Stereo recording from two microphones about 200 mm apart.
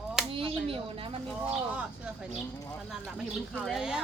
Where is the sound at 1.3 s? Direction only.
5° right (ahead or behind).